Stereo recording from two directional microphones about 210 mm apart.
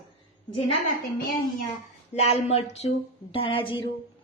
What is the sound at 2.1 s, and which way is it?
Speech, 30° left (ahead or behind).